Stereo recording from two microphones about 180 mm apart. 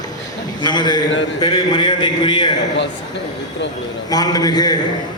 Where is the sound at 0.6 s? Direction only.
25° left (ahead or behind).